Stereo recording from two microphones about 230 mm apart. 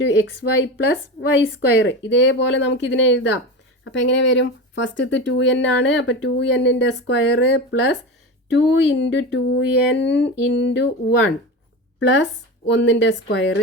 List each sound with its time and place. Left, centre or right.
0.0 s speech: left
2.0 s speech: left